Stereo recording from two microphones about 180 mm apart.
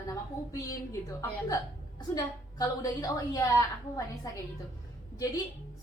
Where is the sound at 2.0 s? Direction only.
20° left (ahead or behind).